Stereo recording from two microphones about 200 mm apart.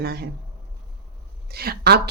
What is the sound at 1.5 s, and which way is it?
Speech, 50° right (ahead or behind).